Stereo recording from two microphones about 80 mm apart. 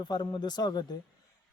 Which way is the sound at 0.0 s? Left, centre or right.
Left.